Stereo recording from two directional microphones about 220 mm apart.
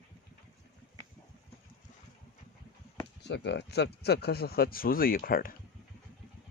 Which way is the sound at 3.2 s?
50° left (ahead or behind).